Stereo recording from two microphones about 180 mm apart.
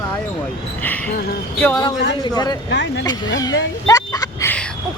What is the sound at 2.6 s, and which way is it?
Speech, 75° left (ahead or behind).